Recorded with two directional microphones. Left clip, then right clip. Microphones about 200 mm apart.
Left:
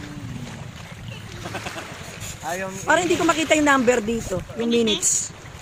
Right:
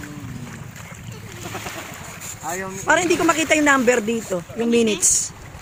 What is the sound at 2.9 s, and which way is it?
Speech, 5° right (ahead or behind).